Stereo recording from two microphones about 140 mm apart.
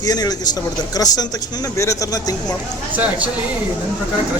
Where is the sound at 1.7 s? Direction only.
20° left (ahead or behind).